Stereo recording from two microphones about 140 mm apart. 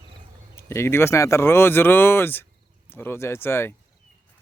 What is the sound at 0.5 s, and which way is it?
Speech, 20° left (ahead or behind).